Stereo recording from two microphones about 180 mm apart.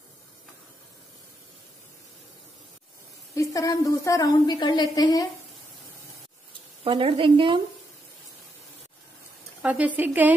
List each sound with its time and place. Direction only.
3.3 s a woman's voice: 20° left (ahead or behind)
6.8 s a woman's voice: 30° right (ahead or behind)
9.6 s speech: 10° right (ahead or behind)